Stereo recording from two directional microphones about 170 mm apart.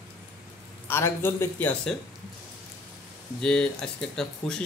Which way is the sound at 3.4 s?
5° left (ahead or behind).